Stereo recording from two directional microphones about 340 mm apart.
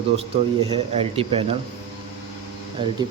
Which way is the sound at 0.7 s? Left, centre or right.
Centre.